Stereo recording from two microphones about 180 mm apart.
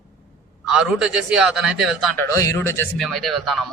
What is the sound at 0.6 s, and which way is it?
Speech, centre (ahead or behind).